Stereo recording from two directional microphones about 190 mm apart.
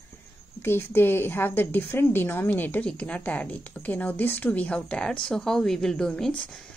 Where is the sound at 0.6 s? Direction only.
10° left (ahead or behind).